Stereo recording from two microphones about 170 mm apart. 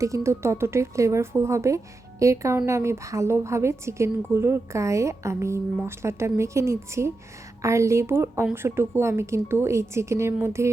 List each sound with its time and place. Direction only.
0.0 s a woman's voice: 15° right (ahead or behind)